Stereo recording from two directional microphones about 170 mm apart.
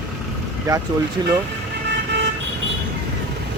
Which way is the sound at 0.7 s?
20° right (ahead or behind).